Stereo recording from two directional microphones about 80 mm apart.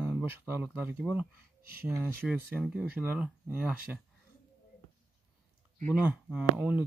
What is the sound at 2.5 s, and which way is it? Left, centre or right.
Speech, centre.